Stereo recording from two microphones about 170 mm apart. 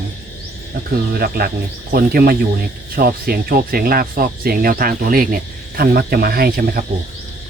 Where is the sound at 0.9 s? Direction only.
65° right (ahead or behind).